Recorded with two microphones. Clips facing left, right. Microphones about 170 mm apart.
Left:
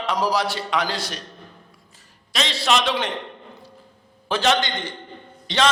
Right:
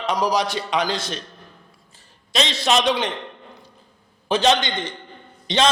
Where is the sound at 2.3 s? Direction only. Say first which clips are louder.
Right 2 dB; 20° right (ahead or behind).